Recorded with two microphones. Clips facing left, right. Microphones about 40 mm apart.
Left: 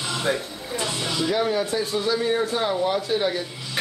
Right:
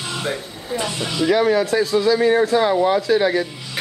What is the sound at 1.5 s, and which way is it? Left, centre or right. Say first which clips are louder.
Speech: right 7 dB; right.